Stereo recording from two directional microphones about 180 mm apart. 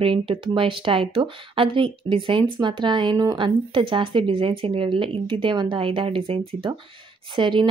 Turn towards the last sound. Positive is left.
turn(degrees=-25)  # may be behind; listen again after turning